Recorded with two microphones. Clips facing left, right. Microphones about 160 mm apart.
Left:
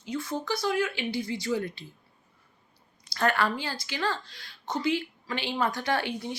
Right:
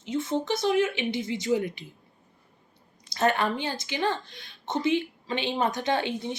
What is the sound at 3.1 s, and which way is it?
A woman's voice, 20° right (ahead or behind).